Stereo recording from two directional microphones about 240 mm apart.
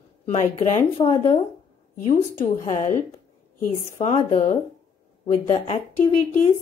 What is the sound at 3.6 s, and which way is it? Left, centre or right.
Speech, left.